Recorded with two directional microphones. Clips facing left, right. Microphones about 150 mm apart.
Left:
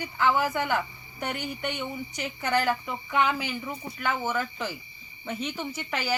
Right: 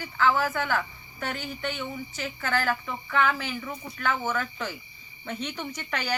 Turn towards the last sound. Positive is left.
turn(degrees=10)  # may be behind; listen again after turning